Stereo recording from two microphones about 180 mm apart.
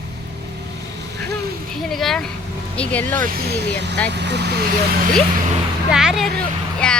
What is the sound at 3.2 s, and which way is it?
Speech, 60° right (ahead or behind).